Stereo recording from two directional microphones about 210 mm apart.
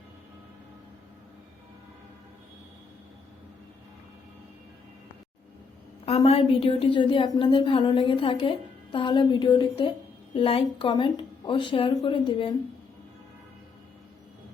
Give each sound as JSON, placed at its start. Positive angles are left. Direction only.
{"t": 6.1, "sound": "a woman's voice", "side_deg": 30}